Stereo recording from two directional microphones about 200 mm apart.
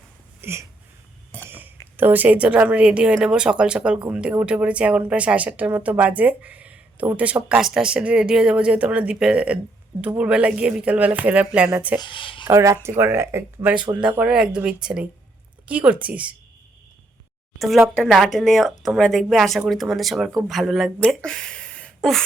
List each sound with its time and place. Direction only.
0.4 s speech: 10° right (ahead or behind)
1.5 s a sound: 10° right (ahead or behind)
2.0 s speech: 10° right (ahead or behind)
11.9 s speech: 25° left (ahead or behind)
12.5 s speech: 15° right (ahead or behind)
17.8 s speech: centre (ahead or behind)